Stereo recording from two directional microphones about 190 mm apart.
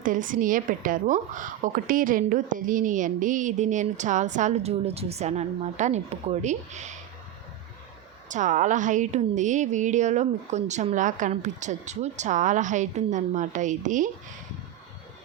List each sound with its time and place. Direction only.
0.0 s a woman's voice: 45° right (ahead or behind)
8.3 s a woman's voice: 40° right (ahead or behind)